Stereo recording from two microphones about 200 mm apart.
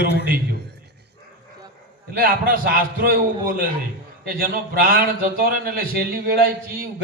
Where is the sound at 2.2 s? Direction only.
45° right (ahead or behind).